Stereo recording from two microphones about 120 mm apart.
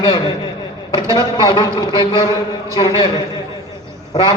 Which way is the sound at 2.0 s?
30° right (ahead or behind).